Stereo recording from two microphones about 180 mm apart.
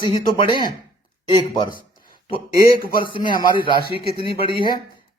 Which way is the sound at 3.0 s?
25° left (ahead or behind).